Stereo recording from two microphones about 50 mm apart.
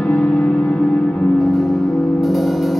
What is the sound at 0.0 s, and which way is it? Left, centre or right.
Music, left.